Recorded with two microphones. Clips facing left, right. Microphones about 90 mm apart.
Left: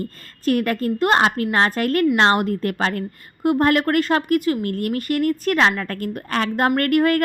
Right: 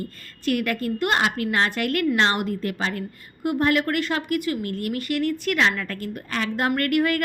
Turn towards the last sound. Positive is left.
turn(degrees=45)  # may be behind; listen again after turning